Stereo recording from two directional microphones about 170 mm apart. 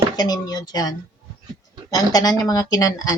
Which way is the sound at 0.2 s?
25° left (ahead or behind).